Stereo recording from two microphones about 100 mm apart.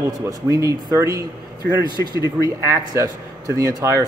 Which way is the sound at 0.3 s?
35° right (ahead or behind).